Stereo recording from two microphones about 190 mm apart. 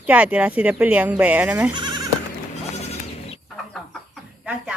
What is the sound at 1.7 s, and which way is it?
Goat, 20° right (ahead or behind).